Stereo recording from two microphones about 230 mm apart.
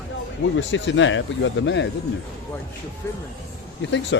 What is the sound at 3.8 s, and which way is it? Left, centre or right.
Speech, left.